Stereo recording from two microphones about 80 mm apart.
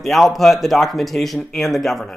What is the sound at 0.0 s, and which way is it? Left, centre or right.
Speech, centre.